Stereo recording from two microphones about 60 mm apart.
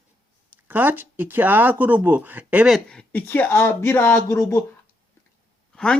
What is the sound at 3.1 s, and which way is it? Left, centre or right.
Speech, left.